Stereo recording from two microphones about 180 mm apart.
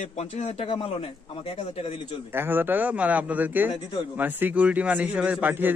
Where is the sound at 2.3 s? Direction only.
10° right (ahead or behind).